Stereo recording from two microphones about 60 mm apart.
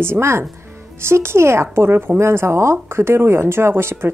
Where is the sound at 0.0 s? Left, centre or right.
Right.